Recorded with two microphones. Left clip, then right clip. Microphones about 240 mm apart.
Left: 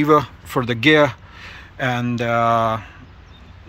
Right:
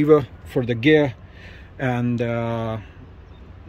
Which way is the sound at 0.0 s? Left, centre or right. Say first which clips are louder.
Left 1 dB; centre.